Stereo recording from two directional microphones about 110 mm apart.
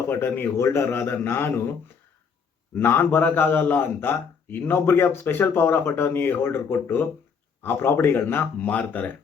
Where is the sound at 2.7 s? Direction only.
20° left (ahead or behind).